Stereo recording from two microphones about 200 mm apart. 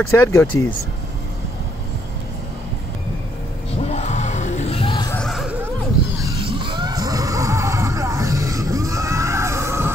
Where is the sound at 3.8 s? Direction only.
35° left (ahead or behind).